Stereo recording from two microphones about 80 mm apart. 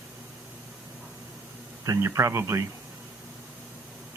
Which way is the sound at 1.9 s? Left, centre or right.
Right.